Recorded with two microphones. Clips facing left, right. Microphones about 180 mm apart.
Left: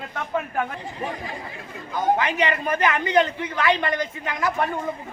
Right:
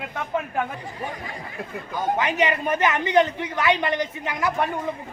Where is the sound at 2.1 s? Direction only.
20° right (ahead or behind).